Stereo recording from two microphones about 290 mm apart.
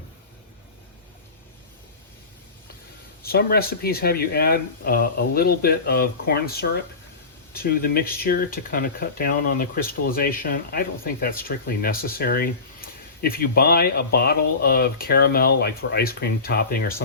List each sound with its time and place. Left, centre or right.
3.2 s speech: left